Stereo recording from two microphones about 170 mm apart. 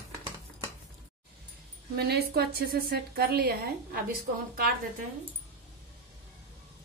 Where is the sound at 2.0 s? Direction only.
70° right (ahead or behind).